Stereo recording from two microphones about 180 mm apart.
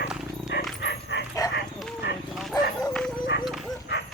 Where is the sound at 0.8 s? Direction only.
70° left (ahead or behind).